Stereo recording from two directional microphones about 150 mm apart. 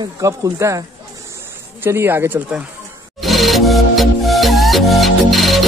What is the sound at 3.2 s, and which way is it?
Music, centre (ahead or behind).